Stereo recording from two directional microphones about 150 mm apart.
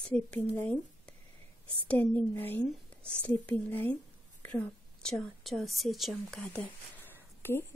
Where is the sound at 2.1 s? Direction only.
10° left (ahead or behind).